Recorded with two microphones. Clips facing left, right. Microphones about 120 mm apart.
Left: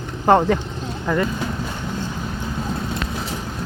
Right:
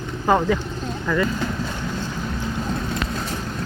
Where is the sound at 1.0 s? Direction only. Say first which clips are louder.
Left 1 dB; 30° left (ahead or behind).